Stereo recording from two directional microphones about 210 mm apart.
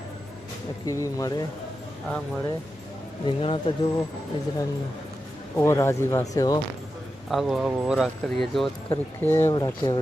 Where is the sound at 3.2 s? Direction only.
25° left (ahead or behind).